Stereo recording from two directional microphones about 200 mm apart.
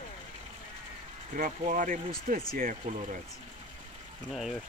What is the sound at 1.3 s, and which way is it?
Speech, 40° right (ahead or behind).